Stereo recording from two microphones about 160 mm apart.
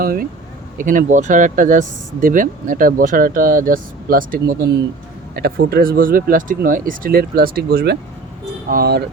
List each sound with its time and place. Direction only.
0.0 s speech: 65° right (ahead or behind)
8.7 s speech: 80° right